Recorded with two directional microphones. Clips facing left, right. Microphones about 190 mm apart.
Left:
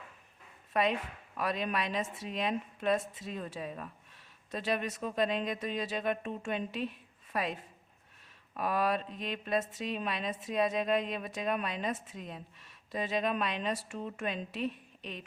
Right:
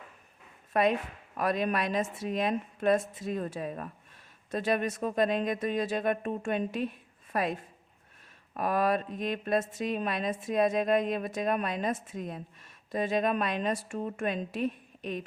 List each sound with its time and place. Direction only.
0.7 s speech: 45° right (ahead or behind)
8.5 s speech: 50° right (ahead or behind)